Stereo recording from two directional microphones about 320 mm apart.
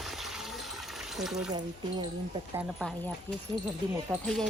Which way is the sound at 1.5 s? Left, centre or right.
Centre.